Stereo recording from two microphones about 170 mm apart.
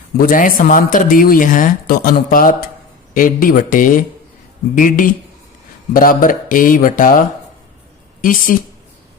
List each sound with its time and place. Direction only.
0.2 s speech: 55° left (ahead or behind)